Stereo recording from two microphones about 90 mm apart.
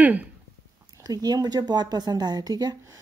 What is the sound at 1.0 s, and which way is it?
Speech, 45° right (ahead or behind).